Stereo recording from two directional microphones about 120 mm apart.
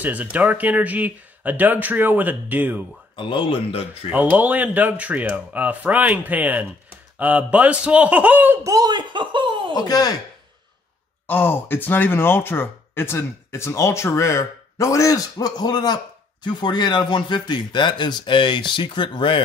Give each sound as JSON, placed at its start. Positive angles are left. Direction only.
{"t": 0.0, "sound": "speech", "side_deg": -15}
{"t": 3.2, "sound": "speech", "side_deg": 45}
{"t": 4.1, "sound": "speech", "side_deg": -15}
{"t": 8.6, "sound": "speech", "side_deg": -30}
{"t": 9.8, "sound": "speech", "side_deg": 35}
{"t": 11.2, "sound": "speech", "side_deg": 15}